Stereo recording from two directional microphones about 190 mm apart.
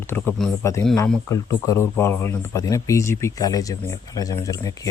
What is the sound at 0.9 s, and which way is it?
Speech, 10° left (ahead or behind).